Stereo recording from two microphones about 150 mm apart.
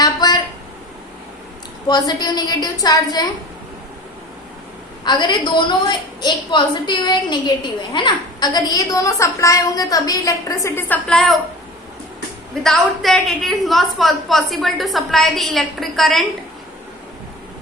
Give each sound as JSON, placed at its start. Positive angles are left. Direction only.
{"t": 0.0, "sound": "a sound", "side_deg": 25}
{"t": 1.9, "sound": "a woman's voice", "side_deg": 25}
{"t": 5.0, "sound": "a woman's voice", "side_deg": 30}
{"t": 12.6, "sound": "a woman's voice", "side_deg": 0}